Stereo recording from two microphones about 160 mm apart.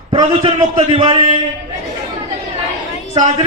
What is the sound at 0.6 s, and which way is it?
Speech, 50° right (ahead or behind).